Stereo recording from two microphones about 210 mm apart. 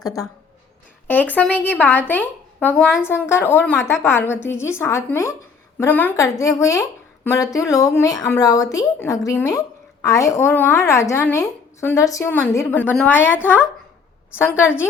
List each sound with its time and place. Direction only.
1.0 s a woman's voice: 10° left (ahead or behind)
2.7 s a woman's voice: 5° right (ahead or behind)
3.1 s a woman's voice: 10° left (ahead or behind)